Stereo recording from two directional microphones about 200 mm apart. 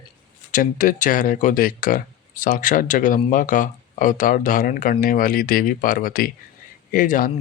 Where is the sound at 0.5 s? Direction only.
40° left (ahead or behind).